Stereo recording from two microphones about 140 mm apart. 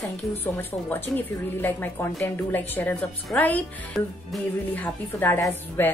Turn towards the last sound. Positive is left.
turn(degrees=15)  # may be behind; listen again after turning